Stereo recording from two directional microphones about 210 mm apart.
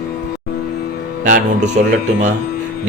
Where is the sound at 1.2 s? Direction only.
40° right (ahead or behind).